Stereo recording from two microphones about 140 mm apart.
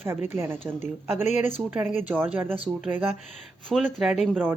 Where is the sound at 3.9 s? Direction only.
Centre (ahead or behind).